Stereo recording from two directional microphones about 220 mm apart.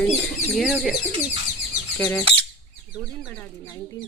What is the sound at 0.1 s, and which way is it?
Speech, centre (ahead or behind).